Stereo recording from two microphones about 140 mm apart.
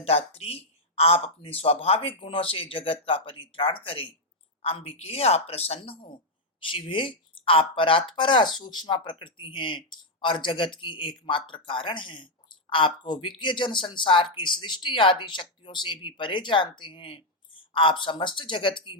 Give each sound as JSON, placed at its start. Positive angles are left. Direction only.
{"t": 0.0, "sound": "speech", "side_deg": 45}